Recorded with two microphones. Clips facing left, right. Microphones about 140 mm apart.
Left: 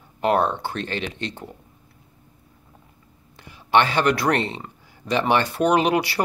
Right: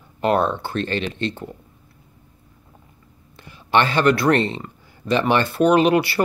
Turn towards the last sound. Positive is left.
turn(degrees=15)  # may be behind; listen again after turning